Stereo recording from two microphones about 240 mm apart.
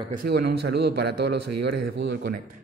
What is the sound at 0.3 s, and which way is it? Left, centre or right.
A man's voice, right.